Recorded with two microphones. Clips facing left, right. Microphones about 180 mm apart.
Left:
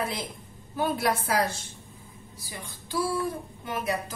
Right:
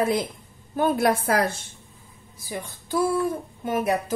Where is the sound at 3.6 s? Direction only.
50° right (ahead or behind).